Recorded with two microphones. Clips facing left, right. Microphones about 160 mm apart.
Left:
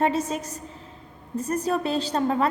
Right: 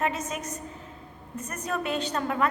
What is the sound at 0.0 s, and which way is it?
A woman's voice, 30° left (ahead or behind).